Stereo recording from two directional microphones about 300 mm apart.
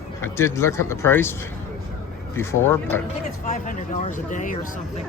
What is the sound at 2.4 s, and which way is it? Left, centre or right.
Speech, centre.